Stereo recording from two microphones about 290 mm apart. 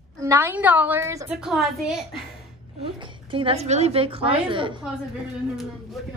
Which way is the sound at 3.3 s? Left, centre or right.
Centre.